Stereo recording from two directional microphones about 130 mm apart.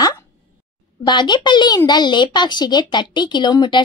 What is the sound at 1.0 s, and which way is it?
A woman's voice, 35° left (ahead or behind).